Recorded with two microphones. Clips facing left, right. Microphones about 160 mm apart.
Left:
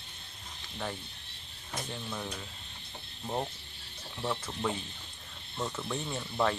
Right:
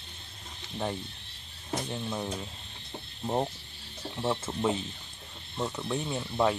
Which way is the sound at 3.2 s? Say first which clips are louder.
Right 5 dB; 25° right (ahead or behind).